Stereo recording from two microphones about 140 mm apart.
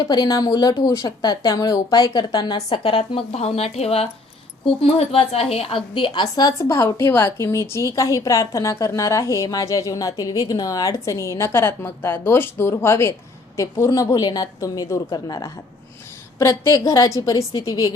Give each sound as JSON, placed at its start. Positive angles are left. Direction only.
{"t": 0.1, "sound": "a woman's voice", "side_deg": 25}